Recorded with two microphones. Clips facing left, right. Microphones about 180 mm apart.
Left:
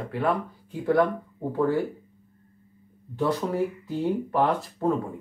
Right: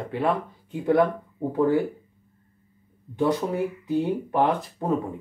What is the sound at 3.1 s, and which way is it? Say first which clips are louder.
Speech: right 2 dB; 20° right (ahead or behind).